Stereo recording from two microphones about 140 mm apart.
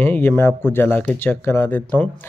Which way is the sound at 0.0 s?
15° left (ahead or behind).